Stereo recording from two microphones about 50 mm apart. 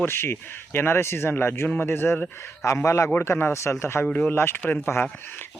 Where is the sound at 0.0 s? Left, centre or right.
Left.